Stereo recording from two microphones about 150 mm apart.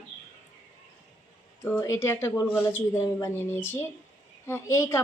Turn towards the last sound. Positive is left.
turn(degrees=20)  # may be behind; listen again after turning